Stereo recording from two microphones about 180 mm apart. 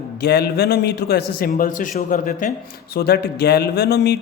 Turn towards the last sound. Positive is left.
turn(degrees=65)  # may be behind; listen again after turning